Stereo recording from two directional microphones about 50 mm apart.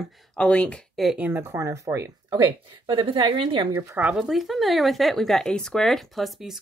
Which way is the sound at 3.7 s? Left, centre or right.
Right.